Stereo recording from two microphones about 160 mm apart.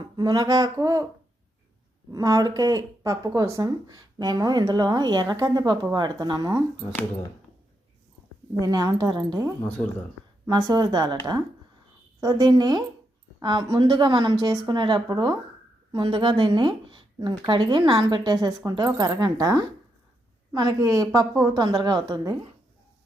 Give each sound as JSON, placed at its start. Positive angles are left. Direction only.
{"t": 0.2, "sound": "speech", "side_deg": -25}
{"t": 2.0, "sound": "speech", "side_deg": -20}
{"t": 8.5, "sound": "speech", "side_deg": -20}
{"t": 12.2, "sound": "speech", "side_deg": -25}